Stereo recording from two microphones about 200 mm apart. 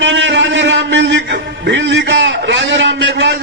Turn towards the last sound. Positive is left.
turn(degrees=-65)  # may be behind; listen again after turning